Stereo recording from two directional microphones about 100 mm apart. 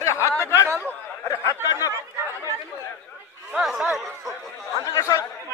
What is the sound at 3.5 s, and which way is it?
Speech, 5° right (ahead or behind).